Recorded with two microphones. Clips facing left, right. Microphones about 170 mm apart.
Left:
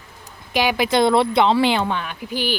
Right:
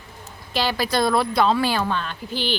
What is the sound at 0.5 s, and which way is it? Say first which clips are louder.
A woman's voice: left 4 dB; 15° left (ahead or behind).